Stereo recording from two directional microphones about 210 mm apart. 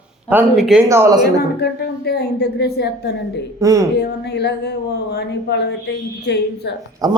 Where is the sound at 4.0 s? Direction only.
50° left (ahead or behind).